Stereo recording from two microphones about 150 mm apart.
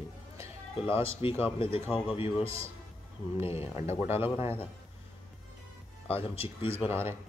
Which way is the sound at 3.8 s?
15° right (ahead or behind).